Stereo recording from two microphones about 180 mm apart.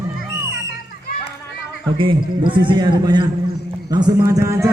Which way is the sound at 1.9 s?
30° right (ahead or behind).